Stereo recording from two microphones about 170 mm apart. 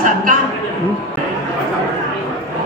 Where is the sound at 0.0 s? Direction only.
50° right (ahead or behind).